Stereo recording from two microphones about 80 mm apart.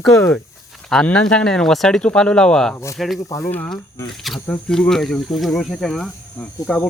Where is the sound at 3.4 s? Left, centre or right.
Left.